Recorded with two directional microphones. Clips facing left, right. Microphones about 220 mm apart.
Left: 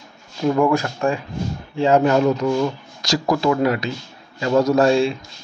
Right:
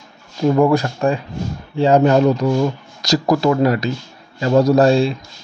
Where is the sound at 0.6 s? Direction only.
35° right (ahead or behind).